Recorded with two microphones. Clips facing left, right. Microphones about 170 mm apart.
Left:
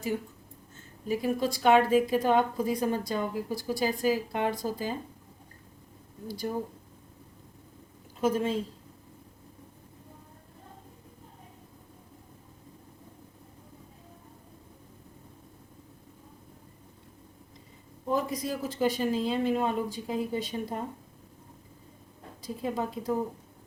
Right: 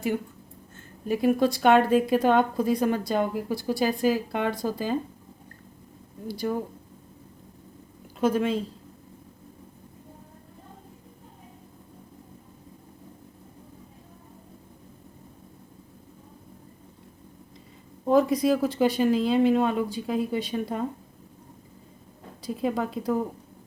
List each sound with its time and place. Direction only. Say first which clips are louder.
1.0 s a woman's voice: right 6 dB; 60° right (ahead or behind)
6.2 s a woman's voice: right 5 dB; 70° right (ahead or behind)
8.2 s a woman's voice: right 3 dB; 70° right (ahead or behind)
18.1 s a woman's voice: right 9 dB; 75° right (ahead or behind)
22.4 s a woman's voice: right 5 dB; 70° right (ahead or behind)